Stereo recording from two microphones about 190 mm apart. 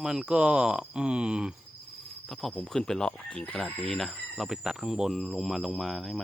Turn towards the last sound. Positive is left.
turn(degrees=0)  # may be behind; listen again after turning